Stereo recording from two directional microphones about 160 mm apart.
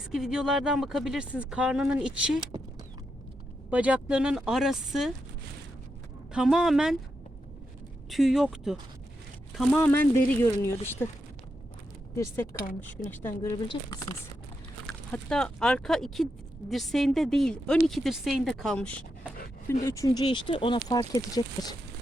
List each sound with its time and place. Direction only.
0.0 s speech: 5° right (ahead or behind)
3.7 s speech: 10° right (ahead or behind)
6.3 s speech: 5° right (ahead or behind)
8.1 s speech: centre (ahead or behind)
9.7 s speech: 10° left (ahead or behind)
12.1 s speech: 15° left (ahead or behind)
14.8 s speech: 5° left (ahead or behind)
19.9 s speech: 20° left (ahead or behind)
20.8 s speech: 20° left (ahead or behind)